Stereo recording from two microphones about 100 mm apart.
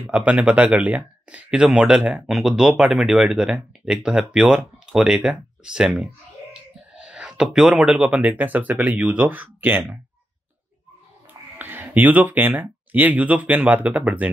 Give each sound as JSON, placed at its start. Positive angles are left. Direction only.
{"t": 0.0, "sound": "speech", "side_deg": -10}
{"t": 11.5, "sound": "speech", "side_deg": -20}